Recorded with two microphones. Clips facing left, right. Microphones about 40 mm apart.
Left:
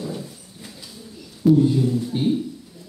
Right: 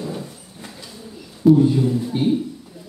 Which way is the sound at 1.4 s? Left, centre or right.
Centre.